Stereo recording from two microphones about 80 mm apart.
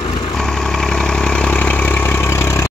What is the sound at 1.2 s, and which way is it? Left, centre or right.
Vehicle, centre.